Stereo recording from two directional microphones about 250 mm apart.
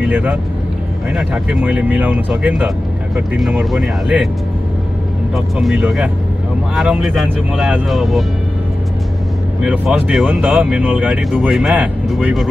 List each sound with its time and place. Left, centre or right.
0.0 s speech: centre
5.3 s speech: centre
9.6 s speech: centre